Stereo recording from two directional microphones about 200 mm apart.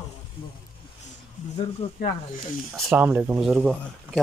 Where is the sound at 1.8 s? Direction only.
30° left (ahead or behind).